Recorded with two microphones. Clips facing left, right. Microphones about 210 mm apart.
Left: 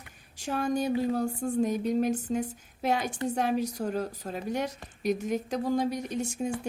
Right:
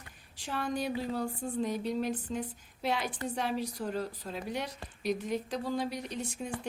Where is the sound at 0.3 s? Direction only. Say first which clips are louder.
Left 6 dB; 45° left (ahead or behind).